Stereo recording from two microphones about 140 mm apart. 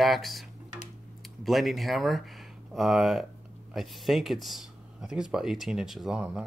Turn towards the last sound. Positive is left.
turn(degrees=-5)  # may be behind; listen again after turning